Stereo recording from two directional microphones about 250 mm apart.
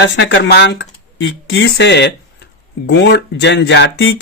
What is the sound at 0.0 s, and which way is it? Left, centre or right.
Speech, left.